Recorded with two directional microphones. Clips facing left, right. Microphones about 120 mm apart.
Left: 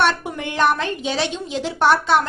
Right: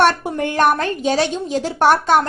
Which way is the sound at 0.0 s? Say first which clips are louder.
Right 4 dB; 45° right (ahead or behind).